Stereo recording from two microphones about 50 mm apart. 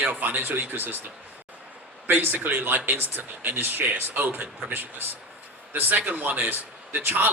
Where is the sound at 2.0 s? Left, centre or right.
Right.